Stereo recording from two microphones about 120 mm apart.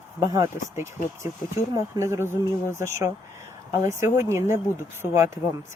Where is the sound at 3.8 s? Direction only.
25° right (ahead or behind).